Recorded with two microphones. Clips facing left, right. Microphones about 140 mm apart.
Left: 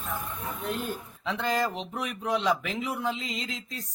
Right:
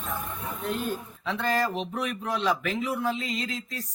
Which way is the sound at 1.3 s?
15° left (ahead or behind).